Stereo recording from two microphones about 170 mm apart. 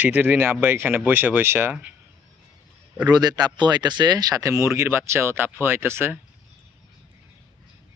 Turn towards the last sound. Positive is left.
turn(degrees=-15)  # may be behind; listen again after turning